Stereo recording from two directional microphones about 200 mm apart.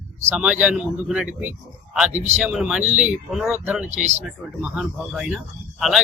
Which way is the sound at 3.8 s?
35° right (ahead or behind).